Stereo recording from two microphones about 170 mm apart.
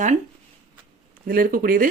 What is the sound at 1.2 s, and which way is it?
Speech, 55° right (ahead or behind).